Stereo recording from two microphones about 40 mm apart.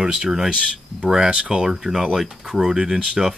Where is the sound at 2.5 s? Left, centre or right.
Centre.